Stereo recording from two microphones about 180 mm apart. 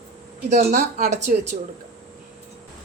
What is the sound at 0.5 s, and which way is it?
Speech, 40° right (ahead or behind).